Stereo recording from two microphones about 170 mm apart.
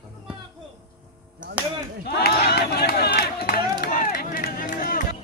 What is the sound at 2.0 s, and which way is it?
Speech, 65° left (ahead or behind).